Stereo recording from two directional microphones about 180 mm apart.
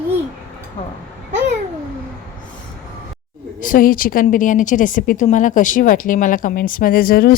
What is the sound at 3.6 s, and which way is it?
A woman's voice, 50° left (ahead or behind).